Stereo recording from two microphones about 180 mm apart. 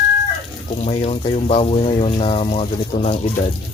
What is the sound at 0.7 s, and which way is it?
Speech, 35° left (ahead or behind).